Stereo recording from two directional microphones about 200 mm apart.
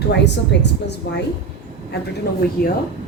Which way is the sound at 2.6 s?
50° left (ahead or behind).